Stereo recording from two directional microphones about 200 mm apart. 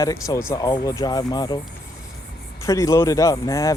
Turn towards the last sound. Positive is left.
turn(degrees=15)  # may be behind; listen again after turning